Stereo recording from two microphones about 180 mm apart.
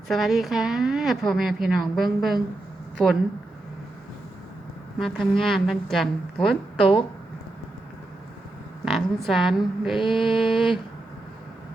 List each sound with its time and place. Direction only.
0.1 s a woman's voice: centre (ahead or behind)
4.9 s a woman's voice: centre (ahead or behind)
8.8 s a woman's voice: centre (ahead or behind)
10.0 s a sound: 30° left (ahead or behind)